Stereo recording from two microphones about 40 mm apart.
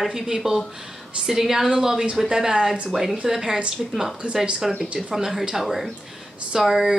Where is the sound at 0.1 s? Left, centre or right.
Centre.